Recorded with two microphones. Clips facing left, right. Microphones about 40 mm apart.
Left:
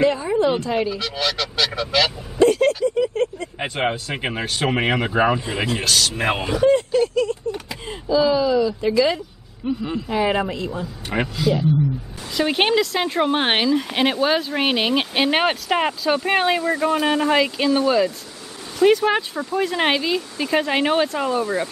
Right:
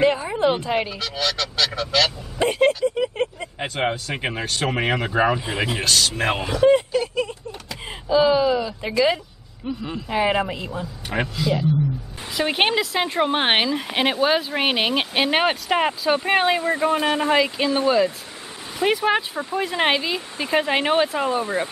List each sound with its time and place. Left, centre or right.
0.0 s speech: centre
0.9 s speech: centre
2.3 s speech: right
3.0 s a sound: right
3.5 s speech: centre
6.7 s speech: centre
9.6 s speech: centre
10.0 s speech: centre
16.6 s speech: centre
17.3 s speech: centre
17.6 s speech: centre
20.2 s speech: centre
20.5 s speech: centre
21.4 s speech: right